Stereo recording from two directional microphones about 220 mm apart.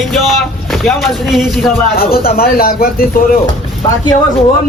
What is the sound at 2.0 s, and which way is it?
Speech, 45° left (ahead or behind).